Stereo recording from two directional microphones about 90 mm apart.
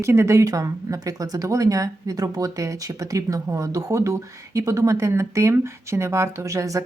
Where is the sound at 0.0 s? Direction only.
30° right (ahead or behind).